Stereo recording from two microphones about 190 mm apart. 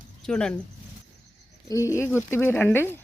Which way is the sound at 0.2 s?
5° left (ahead or behind).